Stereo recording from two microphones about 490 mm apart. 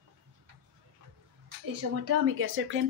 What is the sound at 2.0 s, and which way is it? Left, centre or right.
Speech, right.